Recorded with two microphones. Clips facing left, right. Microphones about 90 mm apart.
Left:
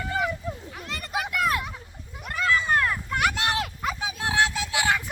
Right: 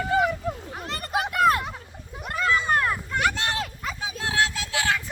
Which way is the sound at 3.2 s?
10° left (ahead or behind).